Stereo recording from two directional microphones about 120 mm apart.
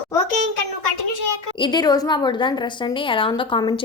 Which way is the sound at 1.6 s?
35° left (ahead or behind).